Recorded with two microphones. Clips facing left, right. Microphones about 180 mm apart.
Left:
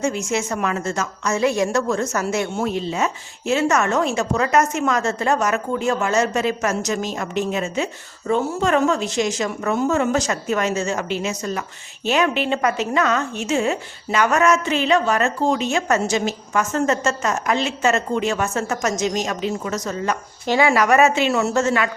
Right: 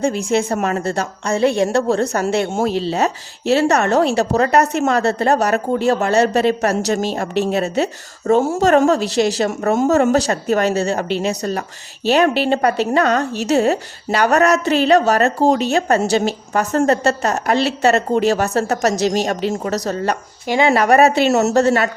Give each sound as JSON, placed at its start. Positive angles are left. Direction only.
{"t": 0.0, "sound": "speech", "side_deg": -35}
{"t": 8.3, "sound": "speech", "side_deg": -50}
{"t": 10.1, "sound": "speech", "side_deg": -35}